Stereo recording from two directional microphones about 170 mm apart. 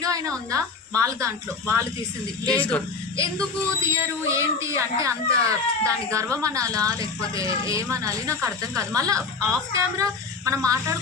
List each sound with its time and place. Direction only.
0.0 s speech: 20° right (ahead or behind)
2.5 s speech: 5° left (ahead or behind)
3.2 s speech: 20° right (ahead or behind)